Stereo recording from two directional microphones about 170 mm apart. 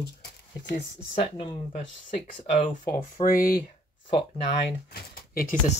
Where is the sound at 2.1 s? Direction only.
50° left (ahead or behind).